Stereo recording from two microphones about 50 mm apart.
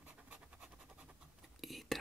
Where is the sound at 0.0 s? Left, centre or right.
Right.